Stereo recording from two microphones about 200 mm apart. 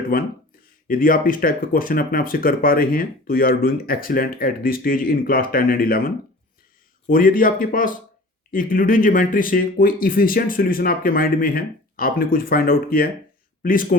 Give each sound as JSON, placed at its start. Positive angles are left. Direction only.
{"t": 0.1, "sound": "speech", "side_deg": 45}
{"t": 7.1, "sound": "speech", "side_deg": 45}